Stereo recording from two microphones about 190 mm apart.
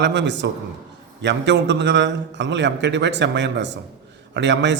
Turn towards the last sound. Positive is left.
turn(degrees=-70)  # may be behind; listen again after turning